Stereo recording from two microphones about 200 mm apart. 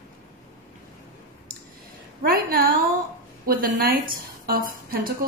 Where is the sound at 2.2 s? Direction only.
45° right (ahead or behind).